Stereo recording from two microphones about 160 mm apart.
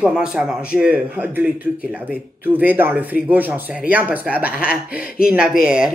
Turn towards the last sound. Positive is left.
turn(degrees=-5)  # may be behind; listen again after turning